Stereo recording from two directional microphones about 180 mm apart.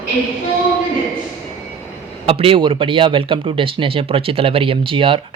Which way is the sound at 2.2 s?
30° right (ahead or behind).